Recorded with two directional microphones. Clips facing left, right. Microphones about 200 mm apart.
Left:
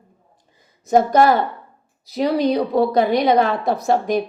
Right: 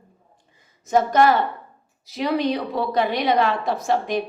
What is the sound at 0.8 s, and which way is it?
A woman's voice, 35° left (ahead or behind).